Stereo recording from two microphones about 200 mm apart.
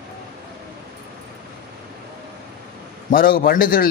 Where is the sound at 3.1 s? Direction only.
45° left (ahead or behind).